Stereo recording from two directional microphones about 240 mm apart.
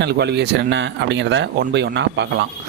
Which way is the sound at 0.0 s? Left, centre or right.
Right.